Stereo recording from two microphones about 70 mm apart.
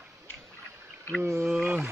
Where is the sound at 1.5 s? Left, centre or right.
Right.